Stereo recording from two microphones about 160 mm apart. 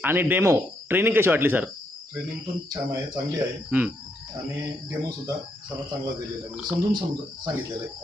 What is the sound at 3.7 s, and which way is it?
Speech, 10° right (ahead or behind).